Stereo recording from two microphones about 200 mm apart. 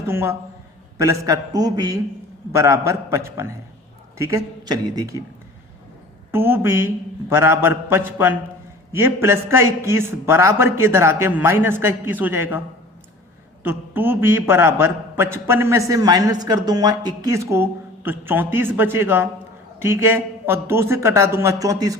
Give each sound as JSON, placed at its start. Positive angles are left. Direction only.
{"t": 0.1, "sound": "a man's voice", "side_deg": -10}
{"t": 6.3, "sound": "a man's voice", "side_deg": -10}
{"t": 13.7, "sound": "a man's voice", "side_deg": -10}